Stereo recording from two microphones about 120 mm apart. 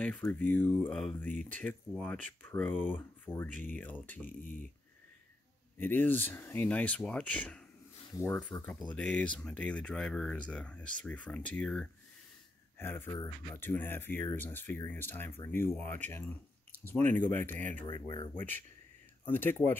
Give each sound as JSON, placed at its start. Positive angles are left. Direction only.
{"t": 0.0, "sound": "speech", "side_deg": 10}
{"t": 5.8, "sound": "speech", "side_deg": 15}
{"t": 12.7, "sound": "speech", "side_deg": 20}
{"t": 13.1, "sound": "speech", "side_deg": 35}
{"t": 13.6, "sound": "speech", "side_deg": 15}
{"t": 17.8, "sound": "speech", "side_deg": 40}
{"t": 18.3, "sound": "speech", "side_deg": 15}